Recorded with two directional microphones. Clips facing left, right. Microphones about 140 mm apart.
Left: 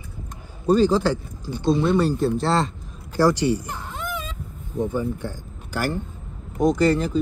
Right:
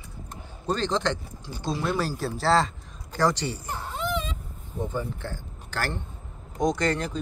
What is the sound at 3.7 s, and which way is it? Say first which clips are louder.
Whimper: even; 15° right (ahead or behind).